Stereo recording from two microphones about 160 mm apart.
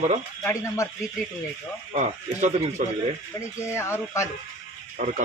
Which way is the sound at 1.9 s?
45° right (ahead or behind).